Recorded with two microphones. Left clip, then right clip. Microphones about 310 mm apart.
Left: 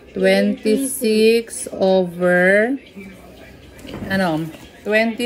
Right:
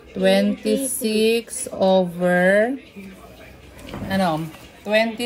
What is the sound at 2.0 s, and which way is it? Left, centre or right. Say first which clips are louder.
Speech: left 3 dB; right.